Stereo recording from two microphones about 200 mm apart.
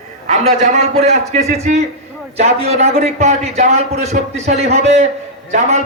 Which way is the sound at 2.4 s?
35° right (ahead or behind).